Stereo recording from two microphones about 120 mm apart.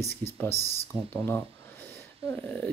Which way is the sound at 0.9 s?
45° right (ahead or behind).